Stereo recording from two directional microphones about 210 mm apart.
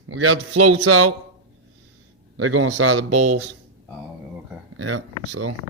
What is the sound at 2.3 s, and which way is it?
Speech, 80° right.